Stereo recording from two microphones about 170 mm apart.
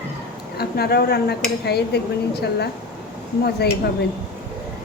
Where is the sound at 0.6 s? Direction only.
65° left (ahead or behind).